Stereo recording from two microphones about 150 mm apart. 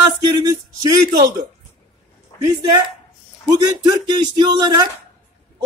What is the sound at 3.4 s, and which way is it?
A man's voice, 25° right (ahead or behind).